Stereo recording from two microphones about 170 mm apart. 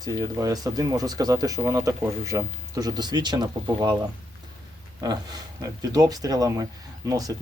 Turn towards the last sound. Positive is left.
turn(degrees=-20)  # may be behind; listen again after turning